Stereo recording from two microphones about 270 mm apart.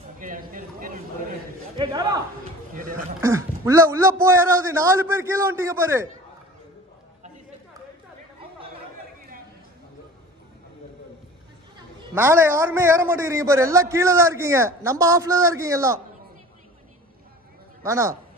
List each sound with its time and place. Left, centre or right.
0.2 s a sound: right
1.8 s a man's voice: centre
3.2 s a man's voice: centre
12.1 s a man's voice: centre
17.8 s a man's voice: centre